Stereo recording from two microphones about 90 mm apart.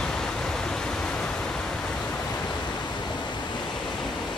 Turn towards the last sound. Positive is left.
turn(degrees=5)  # may be behind; listen again after turning